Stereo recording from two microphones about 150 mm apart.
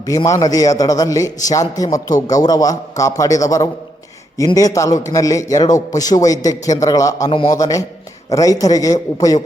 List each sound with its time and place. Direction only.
0.0 s a man's voice: 25° left (ahead or behind)